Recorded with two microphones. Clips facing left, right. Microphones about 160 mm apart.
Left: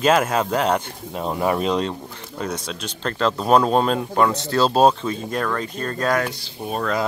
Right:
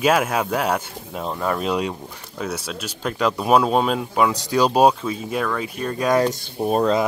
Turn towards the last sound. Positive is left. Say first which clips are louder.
# right 7 dB
turn(degrees=-40)  # may be behind; listen again after turning